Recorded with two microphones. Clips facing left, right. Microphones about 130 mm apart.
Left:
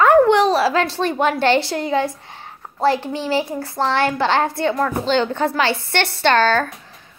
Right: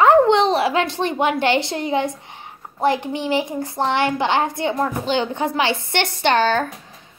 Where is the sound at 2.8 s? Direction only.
20° right (ahead or behind).